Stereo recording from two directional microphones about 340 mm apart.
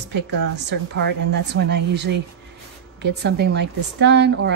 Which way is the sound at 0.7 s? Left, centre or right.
Right.